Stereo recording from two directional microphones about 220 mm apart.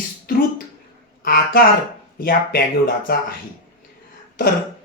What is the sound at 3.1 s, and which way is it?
Speech, 40° left (ahead or behind).